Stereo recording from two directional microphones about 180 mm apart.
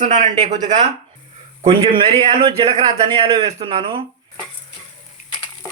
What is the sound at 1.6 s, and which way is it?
A man's voice, 30° right (ahead or behind).